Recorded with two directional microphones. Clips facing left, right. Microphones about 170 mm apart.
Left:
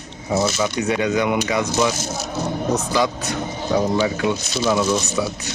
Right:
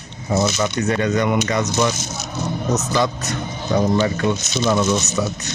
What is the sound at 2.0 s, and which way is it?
Speech, 35° left (ahead or behind).